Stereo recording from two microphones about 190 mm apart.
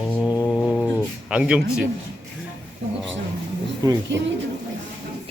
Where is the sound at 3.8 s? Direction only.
20° right (ahead or behind).